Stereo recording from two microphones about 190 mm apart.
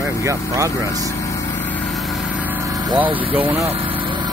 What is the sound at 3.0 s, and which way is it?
Speech, 10° right (ahead or behind).